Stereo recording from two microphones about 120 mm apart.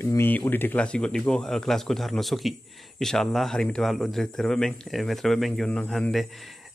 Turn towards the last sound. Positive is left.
turn(degrees=5)  # may be behind; listen again after turning